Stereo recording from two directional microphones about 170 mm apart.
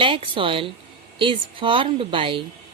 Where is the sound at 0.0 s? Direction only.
30° right (ahead or behind).